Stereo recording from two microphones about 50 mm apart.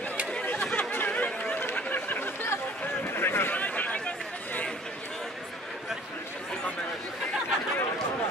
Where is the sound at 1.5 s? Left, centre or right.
Left.